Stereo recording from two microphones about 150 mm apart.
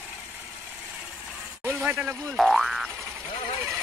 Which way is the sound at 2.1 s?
Centre (ahead or behind).